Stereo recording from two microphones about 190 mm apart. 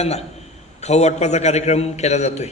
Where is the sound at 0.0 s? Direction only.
35° left (ahead or behind).